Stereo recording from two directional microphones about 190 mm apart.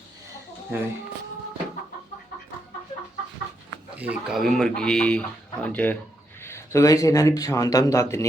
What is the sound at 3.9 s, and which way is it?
Speech, 10° right (ahead or behind).